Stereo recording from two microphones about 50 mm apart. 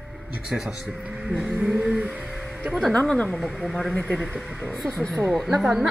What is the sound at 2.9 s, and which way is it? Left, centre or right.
A woman's voice, left.